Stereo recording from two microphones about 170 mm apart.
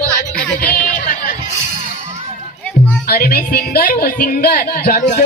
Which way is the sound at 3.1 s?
65° left (ahead or behind).